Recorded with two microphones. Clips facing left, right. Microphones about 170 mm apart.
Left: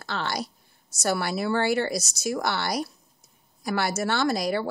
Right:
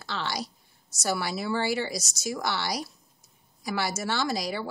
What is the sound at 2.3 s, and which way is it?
Speech, 55° left (ahead or behind).